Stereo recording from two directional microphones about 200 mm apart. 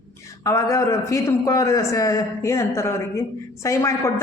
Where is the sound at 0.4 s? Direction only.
15° left (ahead or behind).